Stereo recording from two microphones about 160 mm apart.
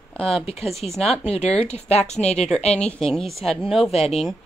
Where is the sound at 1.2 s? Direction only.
40° left (ahead or behind).